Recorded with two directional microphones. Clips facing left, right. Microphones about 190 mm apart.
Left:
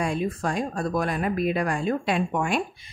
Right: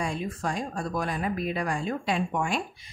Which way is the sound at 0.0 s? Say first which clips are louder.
Left 4 dB; 60° left (ahead or behind).